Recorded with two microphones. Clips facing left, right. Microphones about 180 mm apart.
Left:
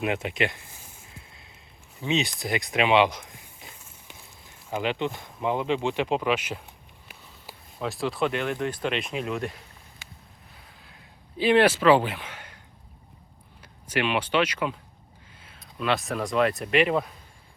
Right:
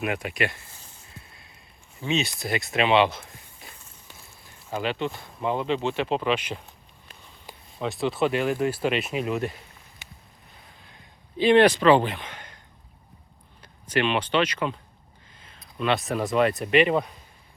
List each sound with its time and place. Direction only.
0.0 s speech: 20° left (ahead or behind)
2.0 s speech: 20° left (ahead or behind); by 9.6 s centre (ahead or behind)
11.3 s speech: 5° left (ahead or behind)
13.6 s speech: 10° left (ahead or behind)